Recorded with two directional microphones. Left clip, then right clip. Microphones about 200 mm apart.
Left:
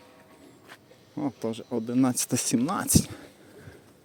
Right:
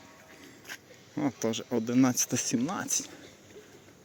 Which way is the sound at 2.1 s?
20° left (ahead or behind).